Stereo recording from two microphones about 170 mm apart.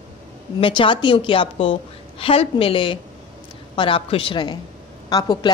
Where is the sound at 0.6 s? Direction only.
30° left (ahead or behind).